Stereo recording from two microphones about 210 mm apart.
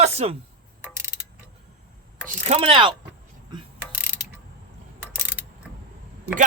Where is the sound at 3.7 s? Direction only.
10° right (ahead or behind).